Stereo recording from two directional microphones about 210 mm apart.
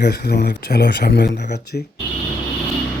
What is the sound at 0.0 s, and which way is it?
Speech, 50° left (ahead or behind).